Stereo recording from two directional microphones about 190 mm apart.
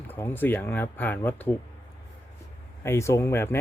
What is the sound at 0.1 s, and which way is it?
Speech, 10° left (ahead or behind).